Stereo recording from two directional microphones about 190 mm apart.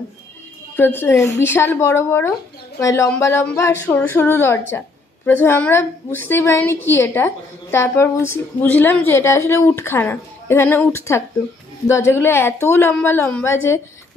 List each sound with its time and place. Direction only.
0.7 s speech: 10° left (ahead or behind)